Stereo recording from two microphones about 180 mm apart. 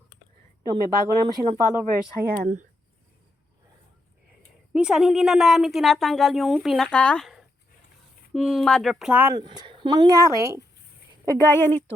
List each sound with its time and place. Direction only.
0.7 s a woman's voice: 20° right (ahead or behind)
2.1 s speech: 60° right (ahead or behind)
4.7 s a woman's voice: 5° right (ahead or behind)
9.3 s a woman's voice: 20° right (ahead or behind)
11.3 s a woman's voice: 15° left (ahead or behind)